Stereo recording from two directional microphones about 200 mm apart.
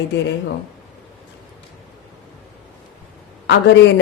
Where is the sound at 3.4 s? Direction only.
65° left (ahead or behind).